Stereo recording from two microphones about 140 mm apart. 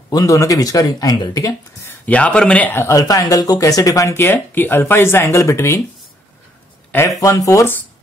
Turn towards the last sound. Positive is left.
turn(degrees=15)  # may be behind; listen again after turning